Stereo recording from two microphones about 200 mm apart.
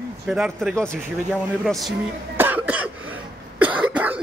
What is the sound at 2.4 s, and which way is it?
Cough, 10° right (ahead or behind).